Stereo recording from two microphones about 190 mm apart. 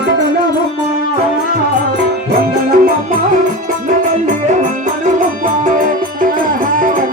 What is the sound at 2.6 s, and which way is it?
Music, 50° right (ahead or behind).